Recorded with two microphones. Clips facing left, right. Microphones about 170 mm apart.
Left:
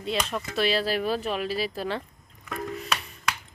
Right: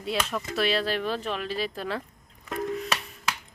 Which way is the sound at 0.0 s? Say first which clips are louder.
Even; 5° right (ahead or behind).